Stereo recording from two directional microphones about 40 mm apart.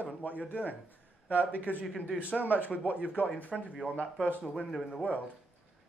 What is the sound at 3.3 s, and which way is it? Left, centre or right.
Speech, left.